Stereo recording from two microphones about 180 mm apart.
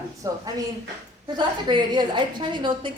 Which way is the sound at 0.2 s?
20° right (ahead or behind).